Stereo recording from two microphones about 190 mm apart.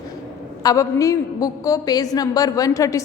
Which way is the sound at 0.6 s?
15° left (ahead or behind).